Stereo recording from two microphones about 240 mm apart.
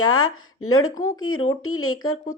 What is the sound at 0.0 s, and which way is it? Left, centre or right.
A woman's voice, left.